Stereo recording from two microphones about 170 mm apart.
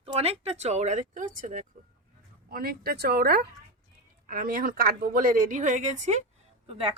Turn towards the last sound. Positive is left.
turn(degrees=-35)  # may be behind; listen again after turning